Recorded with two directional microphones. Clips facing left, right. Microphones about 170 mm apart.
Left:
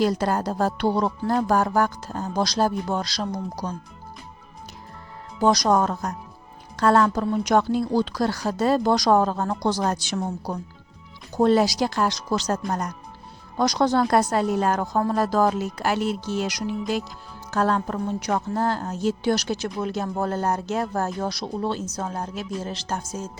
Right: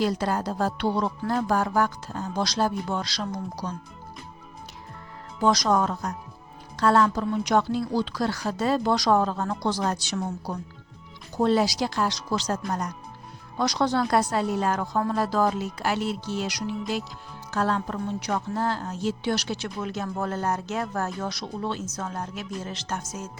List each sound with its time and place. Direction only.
0.0 s a woman's voice: 45° left (ahead or behind)
5.4 s a woman's voice: 40° left (ahead or behind)
11.3 s a woman's voice: 45° left (ahead or behind); by 23.3 s 30° left (ahead or behind)